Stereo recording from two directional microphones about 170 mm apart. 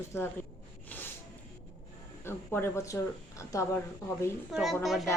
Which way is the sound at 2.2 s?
15° left (ahead or behind).